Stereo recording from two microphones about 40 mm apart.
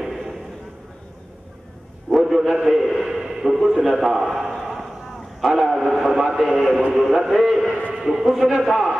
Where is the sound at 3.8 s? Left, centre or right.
Centre.